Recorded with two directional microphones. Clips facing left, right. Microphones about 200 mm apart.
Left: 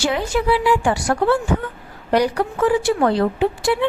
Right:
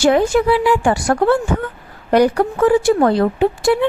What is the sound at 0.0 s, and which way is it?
A woman's voice, 50° right (ahead or behind).